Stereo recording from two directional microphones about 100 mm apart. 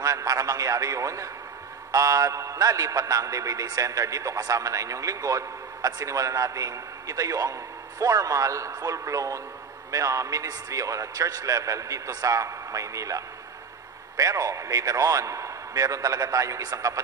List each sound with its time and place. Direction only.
0.0 s a man's voice: 35° right (ahead or behind)